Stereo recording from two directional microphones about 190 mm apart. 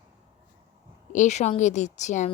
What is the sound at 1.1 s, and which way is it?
A woman's voice, 40° left (ahead or behind).